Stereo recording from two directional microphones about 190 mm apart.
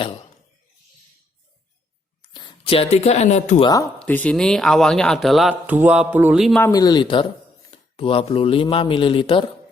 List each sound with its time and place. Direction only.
2.3 s speech: 25° left (ahead or behind)
3.6 s speech: 20° left (ahead or behind)
4.0 s speech: 5° left (ahead or behind)
6.6 s speech: 20° left (ahead or behind)